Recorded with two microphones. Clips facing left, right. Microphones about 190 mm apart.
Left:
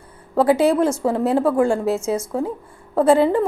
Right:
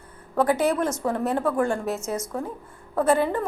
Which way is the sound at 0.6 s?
30° left (ahead or behind).